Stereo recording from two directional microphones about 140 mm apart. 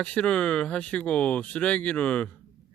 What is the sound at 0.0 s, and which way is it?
Speech, 10° left (ahead or behind).